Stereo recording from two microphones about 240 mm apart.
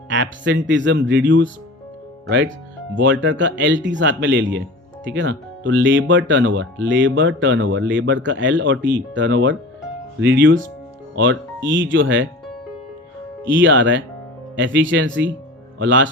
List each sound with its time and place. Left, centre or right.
0.1 s speech: right
2.9 s speech: right
13.4 s speech: right